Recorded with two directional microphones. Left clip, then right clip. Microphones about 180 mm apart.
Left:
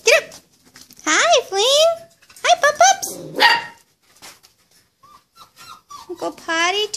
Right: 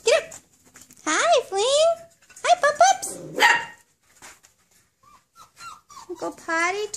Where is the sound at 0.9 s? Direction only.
10° right (ahead or behind).